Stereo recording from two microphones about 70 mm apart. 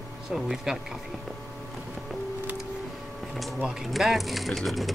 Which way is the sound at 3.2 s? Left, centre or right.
Centre.